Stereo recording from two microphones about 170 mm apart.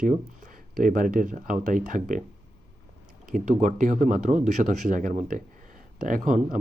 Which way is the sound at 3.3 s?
45° right (ahead or behind).